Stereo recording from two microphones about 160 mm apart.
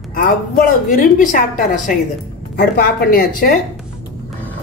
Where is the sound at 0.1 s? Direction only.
60° left (ahead or behind).